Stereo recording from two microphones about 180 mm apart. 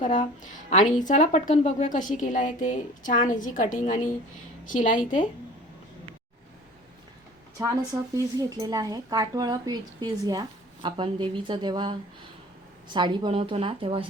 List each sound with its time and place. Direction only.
0.0 s a woman's voice: 45° left (ahead or behind)
7.6 s speech: 20° right (ahead or behind)